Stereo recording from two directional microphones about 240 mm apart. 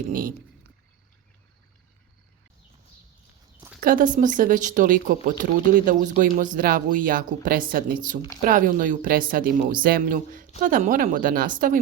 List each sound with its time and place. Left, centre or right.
0.1 s speech: right
3.8 s speech: right